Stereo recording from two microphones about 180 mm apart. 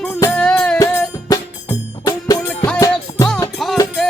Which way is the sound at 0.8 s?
20° left (ahead or behind).